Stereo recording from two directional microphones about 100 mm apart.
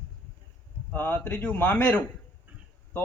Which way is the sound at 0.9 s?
20° left (ahead or behind).